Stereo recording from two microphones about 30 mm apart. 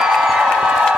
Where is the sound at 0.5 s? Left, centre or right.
Right.